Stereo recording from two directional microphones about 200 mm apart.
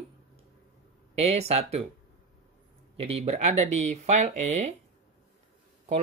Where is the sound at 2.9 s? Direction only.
30° right (ahead or behind).